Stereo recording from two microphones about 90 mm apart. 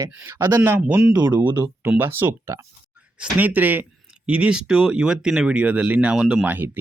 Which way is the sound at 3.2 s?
20° right (ahead or behind).